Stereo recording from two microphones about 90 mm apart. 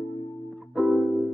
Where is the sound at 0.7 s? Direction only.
Centre (ahead or behind).